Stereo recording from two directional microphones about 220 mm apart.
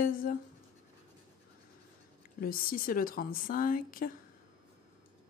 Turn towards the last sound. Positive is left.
turn(degrees=40)  # may be behind; listen again after turning